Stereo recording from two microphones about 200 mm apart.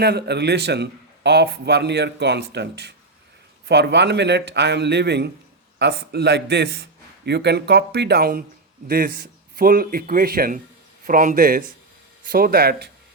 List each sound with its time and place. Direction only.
0.0 s a man's voice: 55° right (ahead or behind)